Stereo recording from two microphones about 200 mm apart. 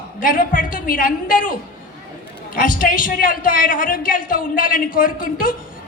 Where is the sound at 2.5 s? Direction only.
45° left (ahead or behind).